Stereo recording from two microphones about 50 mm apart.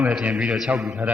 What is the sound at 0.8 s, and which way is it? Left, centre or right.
Speech, centre.